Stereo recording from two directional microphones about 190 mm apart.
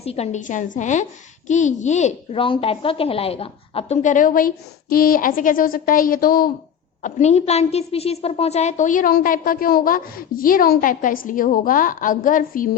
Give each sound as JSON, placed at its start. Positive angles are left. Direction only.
{"t": 0.0, "sound": "a child's voice", "side_deg": 35}
{"t": 7.0, "sound": "a woman's voice", "side_deg": 35}